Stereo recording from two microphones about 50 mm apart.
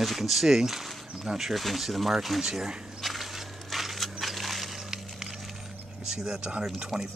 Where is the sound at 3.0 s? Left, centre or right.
Centre.